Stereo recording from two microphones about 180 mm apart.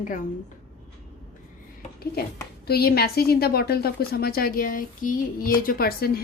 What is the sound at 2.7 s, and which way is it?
A woman's voice, 60° left (ahead or behind).